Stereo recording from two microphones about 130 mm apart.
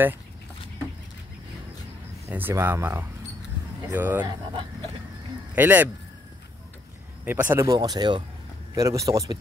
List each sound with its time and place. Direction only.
2.2 s speech: 15° right (ahead or behind)
4.2 s speech: 30° right (ahead or behind)
5.5 s speech: 15° right (ahead or behind)
7.2 s speech: 15° right (ahead or behind)
7.6 s speech: 30° right (ahead or behind)